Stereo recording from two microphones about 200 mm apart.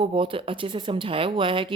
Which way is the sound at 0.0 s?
25° right (ahead or behind).